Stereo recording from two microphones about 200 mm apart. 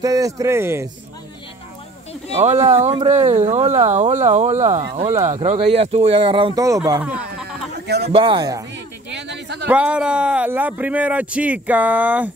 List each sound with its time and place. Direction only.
0.0 s speech: 15° right (ahead or behind)
2.3 s speech: 35° right (ahead or behind); by 7.4 s 10° right (ahead or behind)
7.8 s speech: 55° right (ahead or behind)
8.1 s speech: 25° right (ahead or behind)
9.1 s a sound: 60° right (ahead or behind)
9.7 s speech: 5° right (ahead or behind)